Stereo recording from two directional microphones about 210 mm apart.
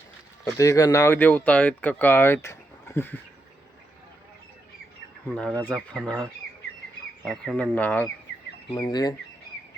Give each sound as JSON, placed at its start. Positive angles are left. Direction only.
{"t": 0.6, "sound": "speech", "side_deg": 15}
{"t": 5.3, "sound": "speech", "side_deg": 5}
{"t": 8.7, "sound": "speech", "side_deg": 20}